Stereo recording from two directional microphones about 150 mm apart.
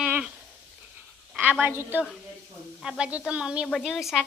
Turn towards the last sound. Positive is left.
turn(degrees=0)  # may be behind; listen again after turning